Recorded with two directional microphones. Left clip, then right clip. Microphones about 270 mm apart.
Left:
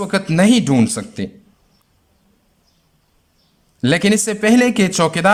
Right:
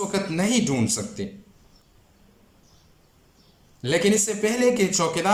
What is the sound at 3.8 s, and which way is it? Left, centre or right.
Speech, left.